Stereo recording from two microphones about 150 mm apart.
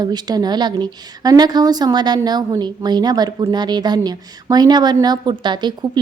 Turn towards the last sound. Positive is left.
turn(degrees=-30)  # may be behind; listen again after turning